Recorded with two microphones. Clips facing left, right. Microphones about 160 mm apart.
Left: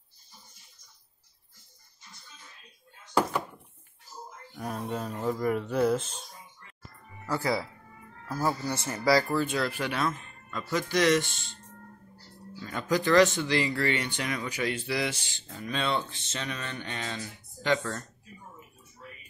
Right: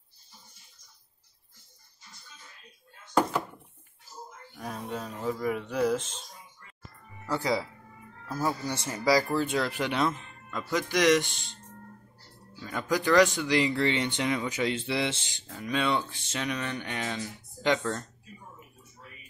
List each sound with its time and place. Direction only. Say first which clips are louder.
4.6 s speech: left 2 dB; 5° left (ahead or behind)
7.2 s speech: even; 15° right (ahead or behind)
8.3 s speech: left 1 dB; 5° left (ahead or behind)
8.7 s speech: even; 15° right (ahead or behind)
12.6 s speech: even; 10° right (ahead or behind)